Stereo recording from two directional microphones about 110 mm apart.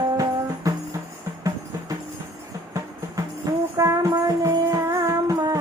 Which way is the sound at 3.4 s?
35° right (ahead or behind).